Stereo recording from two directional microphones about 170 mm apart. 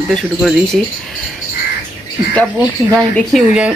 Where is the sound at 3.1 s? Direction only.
Centre (ahead or behind).